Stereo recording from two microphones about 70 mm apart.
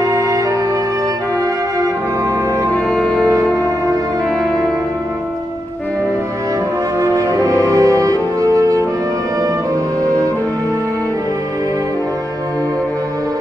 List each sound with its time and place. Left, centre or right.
2.9 s music: centre
7.3 s music: right